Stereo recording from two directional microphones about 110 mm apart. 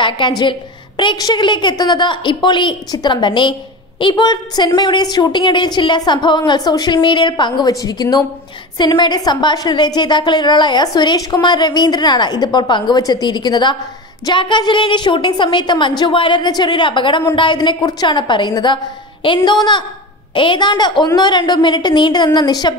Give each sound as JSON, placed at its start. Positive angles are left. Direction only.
{"t": 0.0, "sound": "a woman's voice", "side_deg": 45}